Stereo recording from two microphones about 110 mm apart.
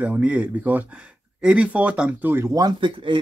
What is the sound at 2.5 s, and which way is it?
Speech, 35° right (ahead or behind).